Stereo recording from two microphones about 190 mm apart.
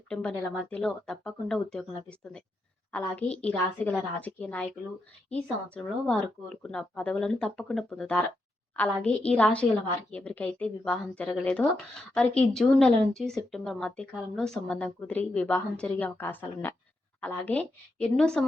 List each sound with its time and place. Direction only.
0.1 s speech: 5° left (ahead or behind)
5.7 s speech: 5° left (ahead or behind)